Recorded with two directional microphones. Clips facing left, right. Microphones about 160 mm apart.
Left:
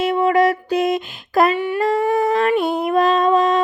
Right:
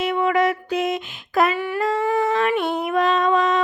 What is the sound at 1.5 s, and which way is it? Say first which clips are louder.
Humming: left 4 dB; 20° left (ahead or behind).